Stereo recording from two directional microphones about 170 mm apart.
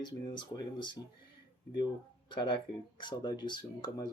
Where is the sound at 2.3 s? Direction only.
25° left (ahead or behind).